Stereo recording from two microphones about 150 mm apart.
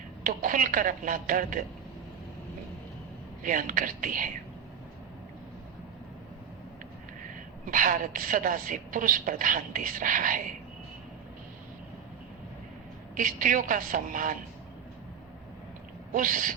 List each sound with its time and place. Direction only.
0.3 s a woman's voice: 65° right (ahead or behind)
3.4 s a woman's voice: 65° right (ahead or behind)
7.7 s a woman's voice: 60° right (ahead or behind)
13.1 s a woman's voice: 65° right (ahead or behind)
16.1 s a woman's voice: 65° right (ahead or behind)